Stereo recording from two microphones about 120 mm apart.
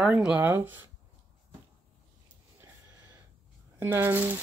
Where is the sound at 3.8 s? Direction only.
20° right (ahead or behind).